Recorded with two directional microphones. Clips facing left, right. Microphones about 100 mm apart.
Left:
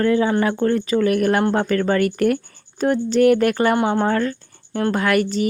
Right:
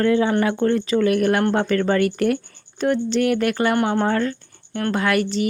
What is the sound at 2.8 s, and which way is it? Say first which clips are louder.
Speech: left 3 dB; 40° left (ahead or behind).